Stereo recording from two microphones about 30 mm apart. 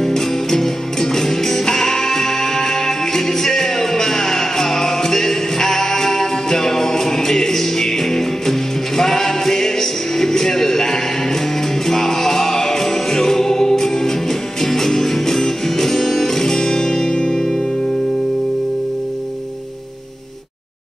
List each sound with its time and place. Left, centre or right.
0.0 s music: centre